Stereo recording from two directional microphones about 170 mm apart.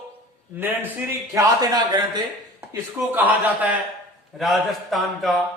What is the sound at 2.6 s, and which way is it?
A man's voice, 10° right (ahead or behind).